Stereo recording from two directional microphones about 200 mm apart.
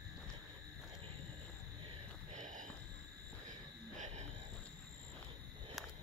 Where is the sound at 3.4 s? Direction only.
35° right (ahead or behind).